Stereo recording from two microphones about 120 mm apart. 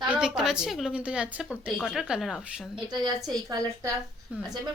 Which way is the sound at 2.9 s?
35° right (ahead or behind).